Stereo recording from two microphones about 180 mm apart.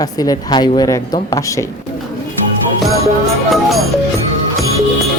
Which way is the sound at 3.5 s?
Centre (ahead or behind).